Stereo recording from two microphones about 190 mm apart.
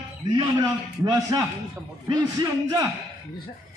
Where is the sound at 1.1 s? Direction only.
20° right (ahead or behind).